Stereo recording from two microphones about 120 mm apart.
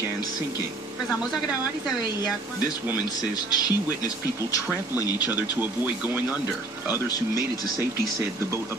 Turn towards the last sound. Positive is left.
turn(degrees=30)  # may be behind; listen again after turning